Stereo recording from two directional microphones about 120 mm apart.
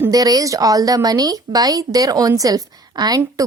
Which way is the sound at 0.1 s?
30° right (ahead or behind).